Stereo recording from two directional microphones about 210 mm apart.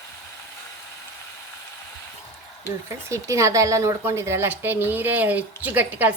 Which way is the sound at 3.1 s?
15° right (ahead or behind).